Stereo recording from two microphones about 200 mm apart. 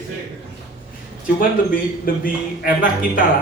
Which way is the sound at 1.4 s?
45° left (ahead or behind).